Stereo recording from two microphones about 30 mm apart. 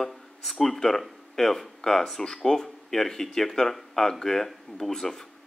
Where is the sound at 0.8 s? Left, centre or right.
Left.